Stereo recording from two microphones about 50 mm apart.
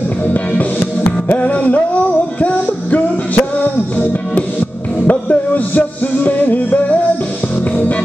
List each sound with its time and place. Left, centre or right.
0.2 s music: left